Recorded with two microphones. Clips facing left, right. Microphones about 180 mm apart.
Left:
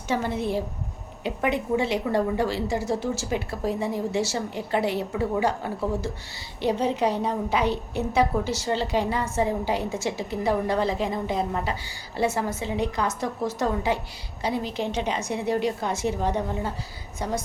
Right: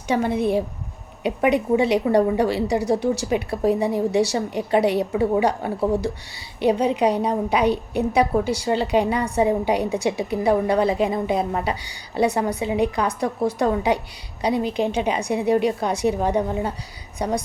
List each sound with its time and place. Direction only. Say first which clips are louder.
0.1 s a woman's voice: right 5 dB; 15° right (ahead or behind)